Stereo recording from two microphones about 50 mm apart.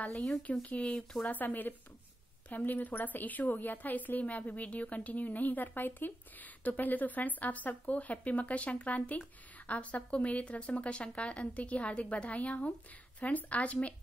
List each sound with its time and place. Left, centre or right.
0.4 s speech: left
1.2 s a woman's voice: left